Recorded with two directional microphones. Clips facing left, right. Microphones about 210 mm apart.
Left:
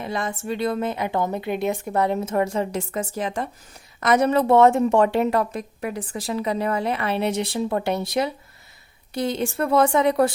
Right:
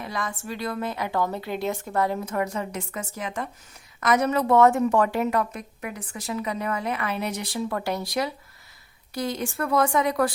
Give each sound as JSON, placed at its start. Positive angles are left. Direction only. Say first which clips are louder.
{"t": 0.0, "sound": "a woman's voice", "louder": "left 4 dB", "side_deg": 25}